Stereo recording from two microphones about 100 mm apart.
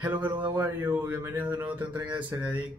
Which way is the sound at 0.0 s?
15° right (ahead or behind).